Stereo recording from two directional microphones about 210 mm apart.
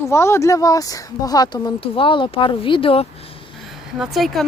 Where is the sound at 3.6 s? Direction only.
Centre (ahead or behind).